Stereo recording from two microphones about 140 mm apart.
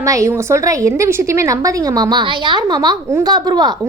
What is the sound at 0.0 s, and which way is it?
A woman's voice, 20° right (ahead or behind).